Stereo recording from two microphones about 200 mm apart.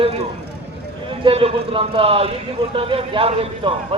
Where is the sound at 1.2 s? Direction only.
25° right (ahead or behind).